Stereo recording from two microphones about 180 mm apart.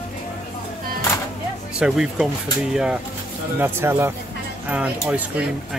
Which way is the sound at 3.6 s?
10° right (ahead or behind).